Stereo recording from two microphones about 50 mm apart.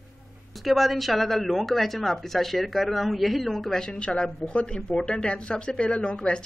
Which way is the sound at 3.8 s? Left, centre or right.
Centre.